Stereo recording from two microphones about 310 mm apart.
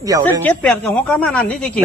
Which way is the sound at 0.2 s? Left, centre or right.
Centre.